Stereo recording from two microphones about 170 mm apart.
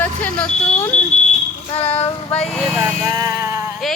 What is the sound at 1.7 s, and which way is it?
Child singing, 35° left (ahead or behind).